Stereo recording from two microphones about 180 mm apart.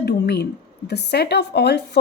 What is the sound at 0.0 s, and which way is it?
A woman's voice, 65° left (ahead or behind).